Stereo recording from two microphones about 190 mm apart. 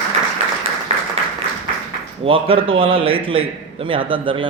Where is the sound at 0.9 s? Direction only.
35° right (ahead or behind).